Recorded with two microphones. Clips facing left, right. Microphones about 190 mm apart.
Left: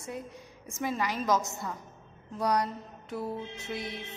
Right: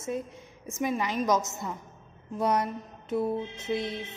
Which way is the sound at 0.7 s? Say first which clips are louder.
Right 3 dB; 20° right (ahead or behind).